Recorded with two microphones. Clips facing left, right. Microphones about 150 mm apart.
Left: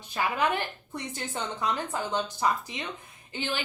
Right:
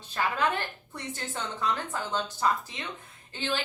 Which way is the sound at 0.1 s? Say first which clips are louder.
Left 1 dB; 15° left (ahead or behind).